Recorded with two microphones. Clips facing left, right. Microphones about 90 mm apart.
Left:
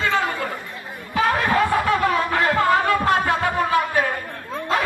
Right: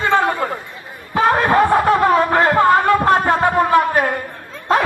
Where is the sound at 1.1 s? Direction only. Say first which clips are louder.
Right 5 dB; 35° right (ahead or behind).